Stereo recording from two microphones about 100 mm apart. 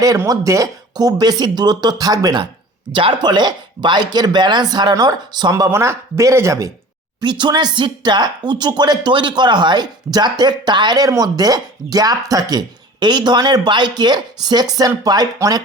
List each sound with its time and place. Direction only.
0.3 s speech: 35° right (ahead or behind)
2.9 s speech: 55° right (ahead or behind); by 6.7 s 30° right (ahead or behind)
7.2 s speech: 50° right (ahead or behind)